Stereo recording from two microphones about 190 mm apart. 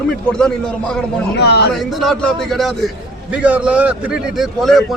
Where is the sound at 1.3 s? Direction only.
60° left (ahead or behind).